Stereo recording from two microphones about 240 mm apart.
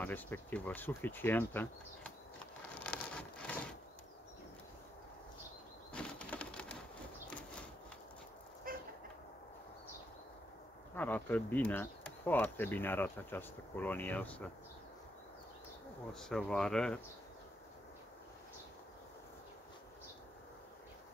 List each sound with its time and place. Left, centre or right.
0.0 s speech: centre
2.8 s rain: centre
5.9 s a sound: centre
8.7 s a sound: right
11.0 s speech: centre
16.1 s speech: centre